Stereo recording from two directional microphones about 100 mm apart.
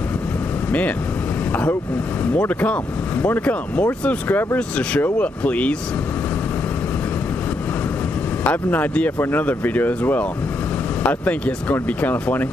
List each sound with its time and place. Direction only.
0.7 s speech: 15° left (ahead or behind)
8.5 s speech: 15° left (ahead or behind)